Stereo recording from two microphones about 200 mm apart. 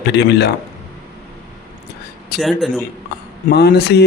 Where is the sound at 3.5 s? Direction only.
55° left (ahead or behind).